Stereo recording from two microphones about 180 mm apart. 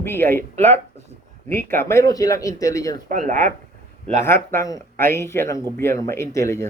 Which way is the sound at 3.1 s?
45° right (ahead or behind).